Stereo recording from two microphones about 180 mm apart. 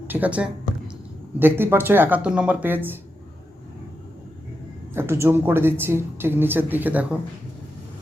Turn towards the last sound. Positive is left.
turn(degrees=-10)  # may be behind; listen again after turning